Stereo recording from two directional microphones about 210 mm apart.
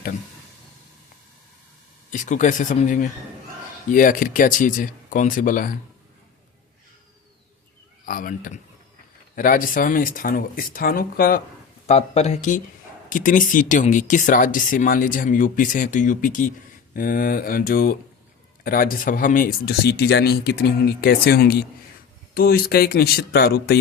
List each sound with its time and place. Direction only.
2.0 s speech: 35° left (ahead or behind)
8.0 s speech: 40° left (ahead or behind)
11.9 s speech: 30° left (ahead or behind); by 23.7 s 50° left (ahead or behind)